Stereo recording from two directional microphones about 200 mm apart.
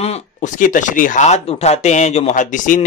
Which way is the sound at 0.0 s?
35° left (ahead or behind).